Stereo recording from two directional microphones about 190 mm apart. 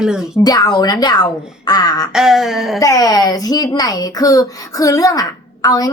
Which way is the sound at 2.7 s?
15° left (ahead or behind).